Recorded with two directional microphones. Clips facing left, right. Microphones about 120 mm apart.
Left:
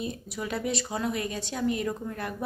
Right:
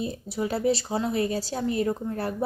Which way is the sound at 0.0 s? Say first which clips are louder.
Right 5 dB; 30° right (ahead or behind).